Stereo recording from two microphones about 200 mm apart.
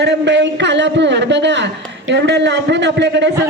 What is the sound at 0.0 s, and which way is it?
A man's voice, 60° right (ahead or behind).